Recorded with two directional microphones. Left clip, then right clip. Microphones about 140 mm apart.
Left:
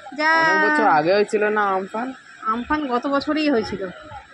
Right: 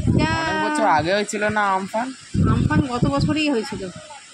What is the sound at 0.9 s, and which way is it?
Speech, 55° right (ahead or behind).